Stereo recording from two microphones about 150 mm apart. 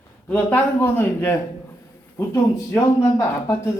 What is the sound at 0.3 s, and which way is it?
Speech, 10° left (ahead or behind).